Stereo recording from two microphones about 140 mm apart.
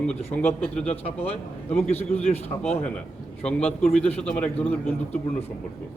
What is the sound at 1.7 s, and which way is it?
A man's voice, 50° left (ahead or behind).